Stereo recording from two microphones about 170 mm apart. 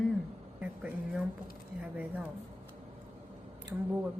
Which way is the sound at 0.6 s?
10° right (ahead or behind).